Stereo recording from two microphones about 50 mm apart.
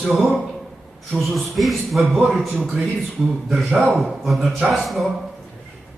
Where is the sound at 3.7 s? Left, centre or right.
Right.